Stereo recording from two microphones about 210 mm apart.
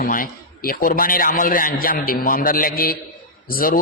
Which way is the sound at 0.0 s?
40° left (ahead or behind).